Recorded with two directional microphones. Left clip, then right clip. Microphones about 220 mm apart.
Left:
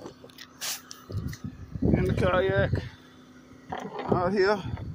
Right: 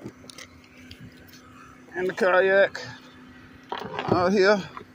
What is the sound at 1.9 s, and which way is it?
Speech, 15° right (ahead or behind).